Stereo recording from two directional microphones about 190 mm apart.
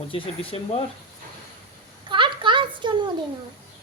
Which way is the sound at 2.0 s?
25° right (ahead or behind).